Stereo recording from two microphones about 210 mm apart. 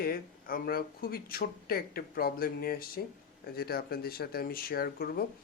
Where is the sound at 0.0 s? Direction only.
45° left (ahead or behind).